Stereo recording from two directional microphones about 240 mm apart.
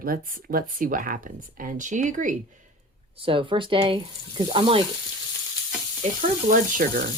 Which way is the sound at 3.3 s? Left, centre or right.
Right.